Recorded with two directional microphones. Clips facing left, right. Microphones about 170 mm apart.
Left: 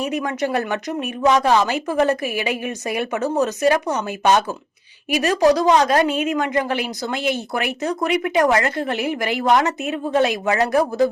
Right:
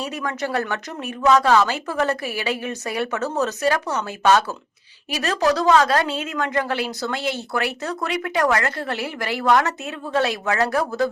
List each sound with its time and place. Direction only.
0.0 s a woman's voice: 20° left (ahead or behind)